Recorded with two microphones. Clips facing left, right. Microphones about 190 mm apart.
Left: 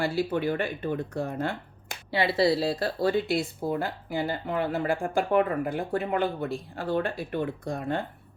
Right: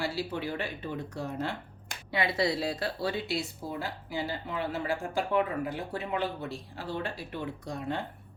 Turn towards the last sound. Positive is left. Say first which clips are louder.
# left 4 dB
turn(degrees=55)  # may be behind; listen again after turning